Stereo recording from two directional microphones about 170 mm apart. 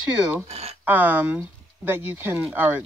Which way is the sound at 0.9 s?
10° right (ahead or behind).